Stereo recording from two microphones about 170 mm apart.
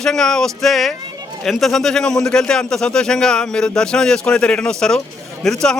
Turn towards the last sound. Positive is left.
turn(degrees=5)  # may be behind; listen again after turning